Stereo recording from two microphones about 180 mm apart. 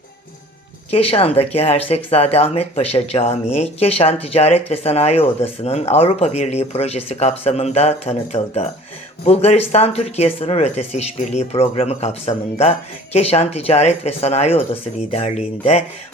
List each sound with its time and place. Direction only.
0.9 s speech: 35° left (ahead or behind)